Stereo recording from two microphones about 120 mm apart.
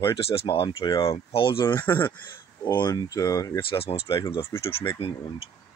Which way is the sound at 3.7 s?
55° left (ahead or behind).